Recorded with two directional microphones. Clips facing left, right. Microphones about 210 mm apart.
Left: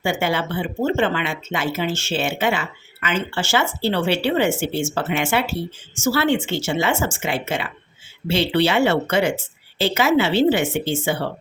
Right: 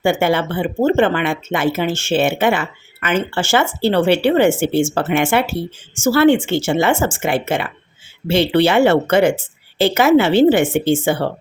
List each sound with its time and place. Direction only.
0.0 s speech: 55° right (ahead or behind)